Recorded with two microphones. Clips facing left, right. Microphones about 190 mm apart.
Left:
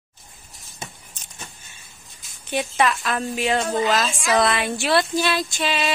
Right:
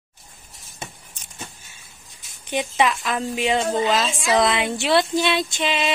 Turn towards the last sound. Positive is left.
turn(degrees=-20)  # may be behind; listen again after turning